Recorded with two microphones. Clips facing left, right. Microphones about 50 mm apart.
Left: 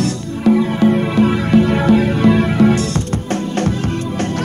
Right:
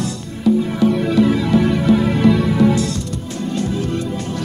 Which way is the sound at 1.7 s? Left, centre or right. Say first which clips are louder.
Left 2 dB; left.